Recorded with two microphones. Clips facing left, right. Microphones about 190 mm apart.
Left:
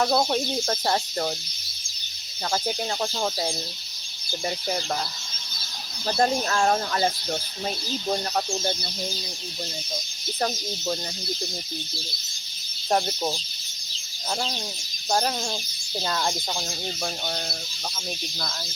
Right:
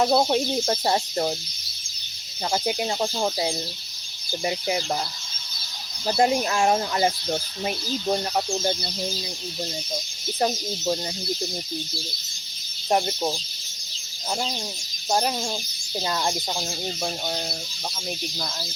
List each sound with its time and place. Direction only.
0.0 s speech: 15° right (ahead or behind)
2.5 s speech: 15° right (ahead or behind)
6.1 s speech: 15° right (ahead or behind)
12.9 s speech: 10° right (ahead or behind)
15.1 s speech: 10° right (ahead or behind)